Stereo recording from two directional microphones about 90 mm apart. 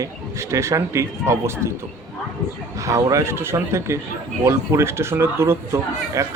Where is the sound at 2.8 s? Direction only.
35° right (ahead or behind).